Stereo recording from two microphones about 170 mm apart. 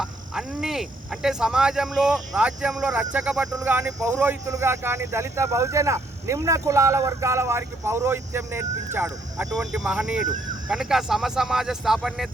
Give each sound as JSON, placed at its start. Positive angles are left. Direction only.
{"t": 0.0, "sound": "speech", "side_deg": 0}
{"t": 9.5, "sound": "speech", "side_deg": 0}